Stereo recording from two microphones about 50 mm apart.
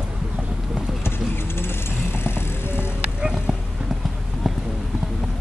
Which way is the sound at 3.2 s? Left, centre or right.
Centre.